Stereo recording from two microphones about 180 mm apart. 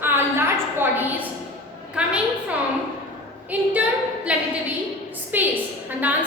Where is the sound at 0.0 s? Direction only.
15° right (ahead or behind).